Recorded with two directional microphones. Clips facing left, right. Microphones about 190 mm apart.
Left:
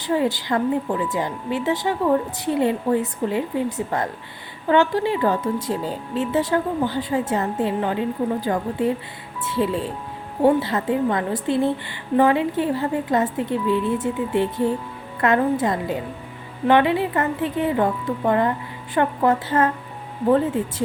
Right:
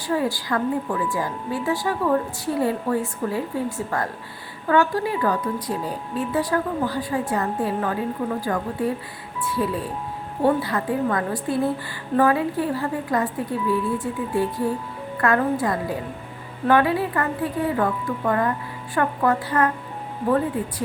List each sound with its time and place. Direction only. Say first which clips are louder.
0.0 s a woman's voice: left 2 dB; 20° left (ahead or behind)